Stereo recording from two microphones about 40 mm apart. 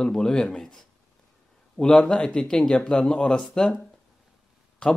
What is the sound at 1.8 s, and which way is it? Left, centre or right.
Speech, left.